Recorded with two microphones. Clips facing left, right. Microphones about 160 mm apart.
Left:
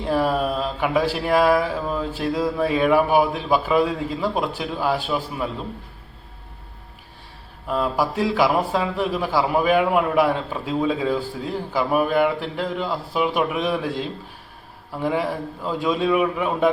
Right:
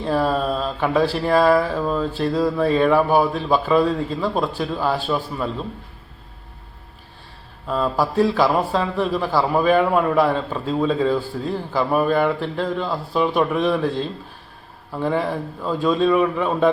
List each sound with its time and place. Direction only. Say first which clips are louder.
0.0 s speech: right 1 dB; 15° left (ahead or behind)
7.7 s speech: right 1 dB; 15° left (ahead or behind)